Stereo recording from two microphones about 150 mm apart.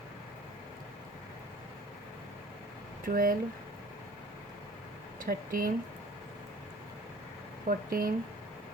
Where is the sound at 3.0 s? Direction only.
70° right (ahead or behind).